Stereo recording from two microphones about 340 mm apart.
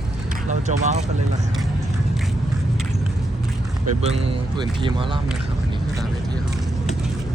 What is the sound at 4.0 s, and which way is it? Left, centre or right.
Speech, centre.